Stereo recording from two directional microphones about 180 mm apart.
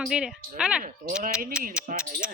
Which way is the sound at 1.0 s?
55° right (ahead or behind).